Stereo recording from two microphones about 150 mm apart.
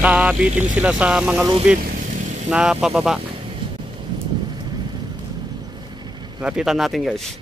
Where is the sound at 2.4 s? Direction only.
5° right (ahead or behind).